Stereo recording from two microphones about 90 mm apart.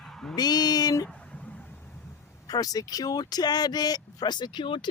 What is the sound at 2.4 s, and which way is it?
Speech, 45° left (ahead or behind).